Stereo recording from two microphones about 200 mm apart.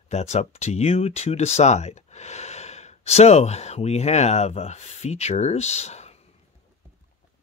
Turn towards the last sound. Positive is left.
turn(degrees=35)  # may be behind; listen again after turning